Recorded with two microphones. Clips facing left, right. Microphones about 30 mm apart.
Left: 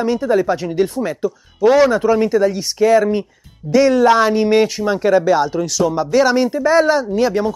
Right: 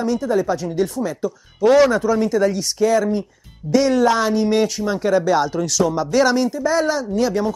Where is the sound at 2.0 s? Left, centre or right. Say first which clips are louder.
Left 3 dB; left.